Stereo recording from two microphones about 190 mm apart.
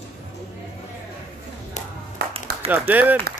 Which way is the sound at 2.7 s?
10° right (ahead or behind).